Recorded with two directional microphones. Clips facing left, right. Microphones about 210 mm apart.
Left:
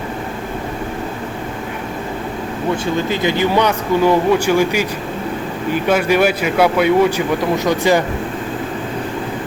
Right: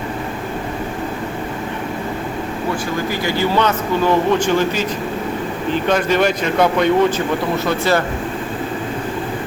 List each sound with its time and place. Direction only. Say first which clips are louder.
3.1 s speech: left 2 dB; 20° left (ahead or behind)